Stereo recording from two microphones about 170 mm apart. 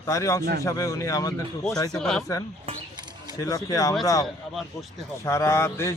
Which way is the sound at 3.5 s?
20° left (ahead or behind).